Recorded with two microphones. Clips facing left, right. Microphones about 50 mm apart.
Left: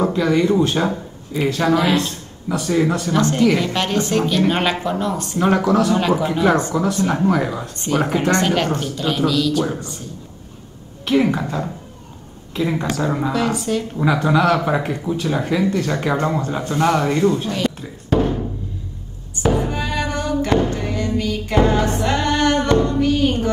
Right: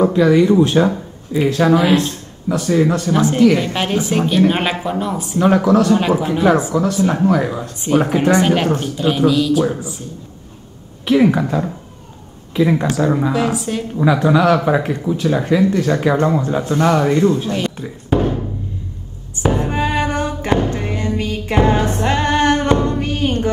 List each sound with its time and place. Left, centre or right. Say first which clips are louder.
0.0 s speech: right 5 dB; centre
11.1 s speech: right 4 dB; centre
18.1 s music: right 1 dB; centre
19.6 s music: right 4 dB; right